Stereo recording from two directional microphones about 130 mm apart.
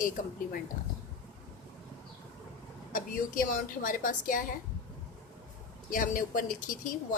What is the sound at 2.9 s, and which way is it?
A woman's voice, 90° left.